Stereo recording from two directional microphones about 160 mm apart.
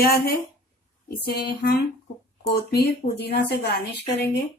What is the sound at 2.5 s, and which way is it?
Speech, 90° left.